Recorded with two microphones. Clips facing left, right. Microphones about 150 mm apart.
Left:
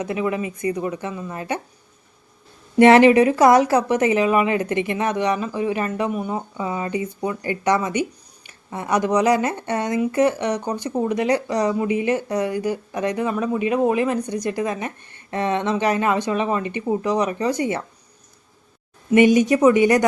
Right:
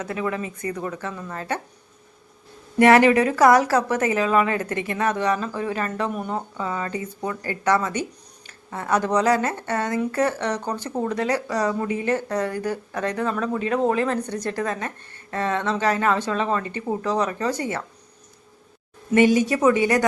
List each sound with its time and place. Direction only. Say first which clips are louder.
0.0 s speech: left 3 dB; 15° left (ahead or behind)
2.7 s speech: left 3 dB; 25° left (ahead or behind)
19.1 s a woman's voice: left 3 dB; 15° left (ahead or behind)